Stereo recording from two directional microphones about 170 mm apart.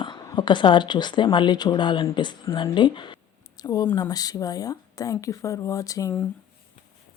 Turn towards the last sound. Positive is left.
turn(degrees=20)  # may be behind; listen again after turning